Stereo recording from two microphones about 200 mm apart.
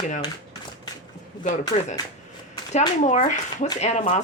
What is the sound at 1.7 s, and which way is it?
Speech, 35° left (ahead or behind).